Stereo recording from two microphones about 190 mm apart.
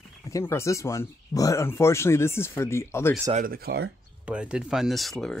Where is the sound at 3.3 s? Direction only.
50° right (ahead or behind).